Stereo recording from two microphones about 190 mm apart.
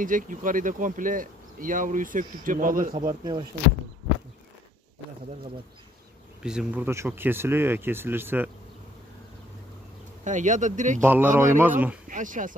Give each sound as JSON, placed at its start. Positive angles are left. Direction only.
{"t": 0.0, "sound": "speech", "side_deg": -45}
{"t": 6.4, "sound": "speech", "side_deg": -5}
{"t": 10.2, "sound": "speech", "side_deg": -40}
{"t": 11.0, "sound": "speech", "side_deg": -10}
{"t": 12.1, "sound": "speech", "side_deg": -45}